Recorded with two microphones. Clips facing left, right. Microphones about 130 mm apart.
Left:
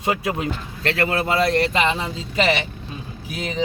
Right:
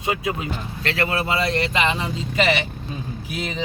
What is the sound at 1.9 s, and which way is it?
Speech, 35° left (ahead or behind).